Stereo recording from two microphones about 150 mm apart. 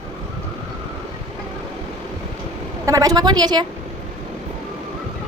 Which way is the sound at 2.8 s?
25° right (ahead or behind).